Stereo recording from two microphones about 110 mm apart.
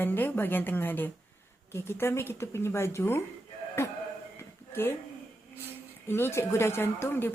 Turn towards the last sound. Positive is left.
turn(degrees=20)  # may be behind; listen again after turning